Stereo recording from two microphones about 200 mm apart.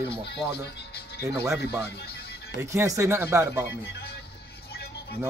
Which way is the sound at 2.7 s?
15° right (ahead or behind).